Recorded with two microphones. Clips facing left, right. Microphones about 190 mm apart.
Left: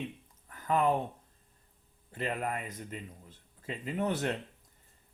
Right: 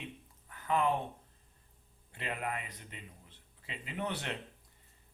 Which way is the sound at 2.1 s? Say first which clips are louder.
Left 4 dB; 45° left (ahead or behind).